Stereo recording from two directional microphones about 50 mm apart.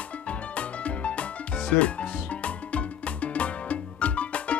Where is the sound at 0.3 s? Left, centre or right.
Left.